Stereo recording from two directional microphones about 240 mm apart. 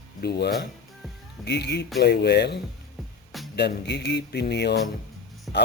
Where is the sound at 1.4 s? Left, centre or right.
Left.